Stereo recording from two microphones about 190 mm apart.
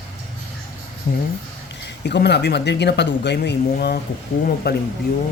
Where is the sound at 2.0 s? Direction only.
65° left (ahead or behind).